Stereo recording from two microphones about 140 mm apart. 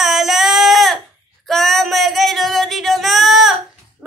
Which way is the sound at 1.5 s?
Centre (ahead or behind).